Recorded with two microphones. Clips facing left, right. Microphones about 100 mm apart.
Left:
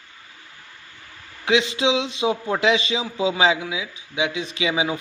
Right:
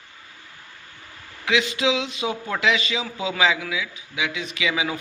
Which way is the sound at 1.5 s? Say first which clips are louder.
Left 2 dB; 30° left (ahead or behind).